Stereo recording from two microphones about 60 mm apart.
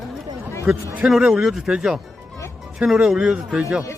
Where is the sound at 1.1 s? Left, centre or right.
Centre.